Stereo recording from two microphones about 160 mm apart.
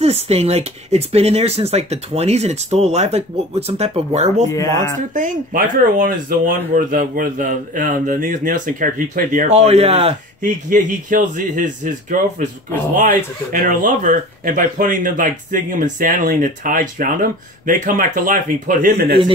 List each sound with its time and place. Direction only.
0.0 s speech: 40° right (ahead or behind)
4.5 s speech: 20° left (ahead or behind)
5.1 s speech: 55° right (ahead or behind); by 10.1 s 40° right (ahead or behind)
10.4 s speech: 55° right (ahead or behind)
13.5 s speech: 55° right (ahead or behind)